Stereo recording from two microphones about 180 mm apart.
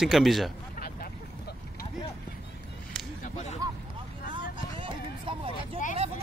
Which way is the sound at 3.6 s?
20° right (ahead or behind).